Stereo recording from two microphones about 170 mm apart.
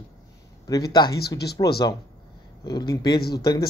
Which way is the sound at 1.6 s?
25° left (ahead or behind).